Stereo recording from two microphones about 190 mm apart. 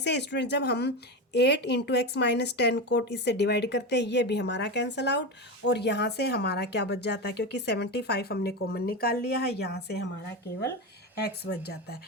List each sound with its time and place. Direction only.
0.0 s a woman's voice: 65° left (ahead or behind)
11.2 s a woman's voice: 60° left (ahead or behind)